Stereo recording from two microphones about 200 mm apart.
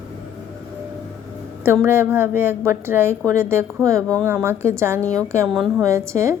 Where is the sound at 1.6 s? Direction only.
10° right (ahead or behind).